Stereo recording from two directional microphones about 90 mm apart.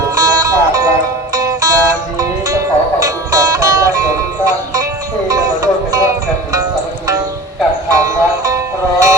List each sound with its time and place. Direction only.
0.2 s music: 40° right (ahead or behind)
7.9 s music: 40° right (ahead or behind)